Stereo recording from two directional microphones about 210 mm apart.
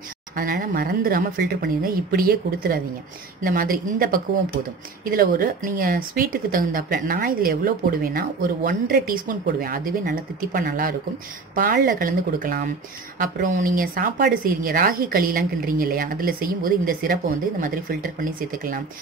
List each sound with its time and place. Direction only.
0.4 s speech: 40° right (ahead or behind)